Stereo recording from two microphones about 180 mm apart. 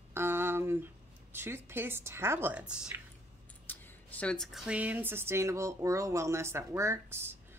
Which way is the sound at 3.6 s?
10° left (ahead or behind).